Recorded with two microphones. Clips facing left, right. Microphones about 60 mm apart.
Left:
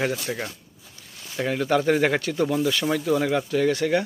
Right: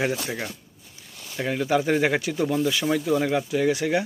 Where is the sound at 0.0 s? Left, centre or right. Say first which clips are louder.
Even; centre.